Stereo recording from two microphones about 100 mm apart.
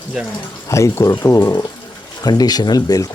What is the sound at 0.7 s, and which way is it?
Speech, 30° left (ahead or behind).